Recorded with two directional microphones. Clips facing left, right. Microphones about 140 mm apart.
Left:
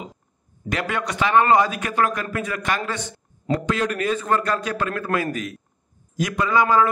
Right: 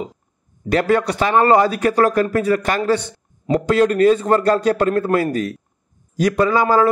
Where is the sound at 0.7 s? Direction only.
35° right (ahead or behind).